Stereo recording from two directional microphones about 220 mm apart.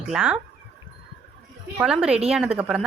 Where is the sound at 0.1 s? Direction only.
5° right (ahead or behind).